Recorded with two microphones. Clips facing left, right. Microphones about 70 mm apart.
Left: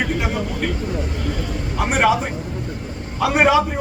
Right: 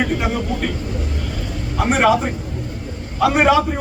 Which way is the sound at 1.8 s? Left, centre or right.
Centre.